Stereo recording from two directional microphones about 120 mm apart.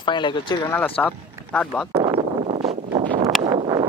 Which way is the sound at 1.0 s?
5° left (ahead or behind).